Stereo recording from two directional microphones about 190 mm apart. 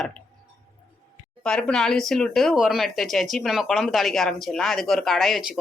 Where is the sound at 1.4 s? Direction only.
5° left (ahead or behind).